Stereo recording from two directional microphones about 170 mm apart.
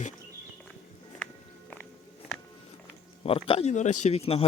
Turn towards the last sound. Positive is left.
turn(degrees=35)  # may be behind; listen again after turning